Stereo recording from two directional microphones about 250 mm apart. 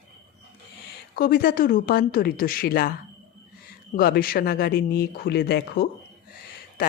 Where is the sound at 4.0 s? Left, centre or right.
Left.